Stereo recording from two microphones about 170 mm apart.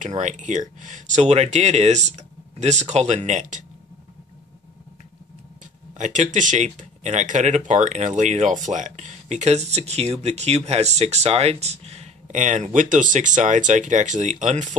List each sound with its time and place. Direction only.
0.0 s speech: 45° right (ahead or behind)
5.9 s speech: 45° right (ahead or behind)